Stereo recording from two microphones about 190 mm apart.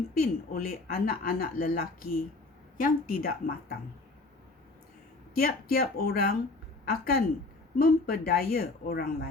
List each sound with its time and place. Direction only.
0.1 s speech: 50° left (ahead or behind)
5.3 s speech: 50° left (ahead or behind)